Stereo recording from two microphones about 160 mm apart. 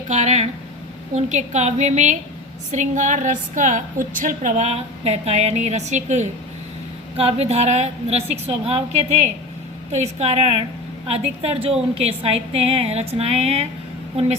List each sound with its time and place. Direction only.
0.1 s a woman's voice: 45° right (ahead or behind)